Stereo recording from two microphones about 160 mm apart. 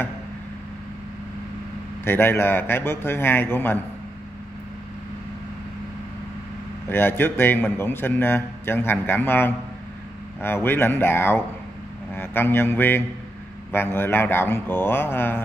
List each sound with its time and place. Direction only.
2.0 s a man's voice: 15° left (ahead or behind)
6.9 s a man's voice: 15° left (ahead or behind)